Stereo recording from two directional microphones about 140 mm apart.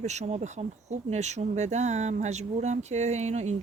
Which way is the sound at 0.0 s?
55° right (ahead or behind).